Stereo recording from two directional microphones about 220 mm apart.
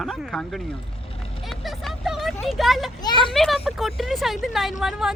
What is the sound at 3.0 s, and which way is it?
Speech, 20° left (ahead or behind).